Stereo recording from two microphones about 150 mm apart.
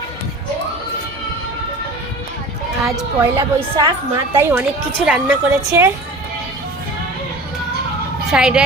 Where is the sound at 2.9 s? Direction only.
25° right (ahead or behind).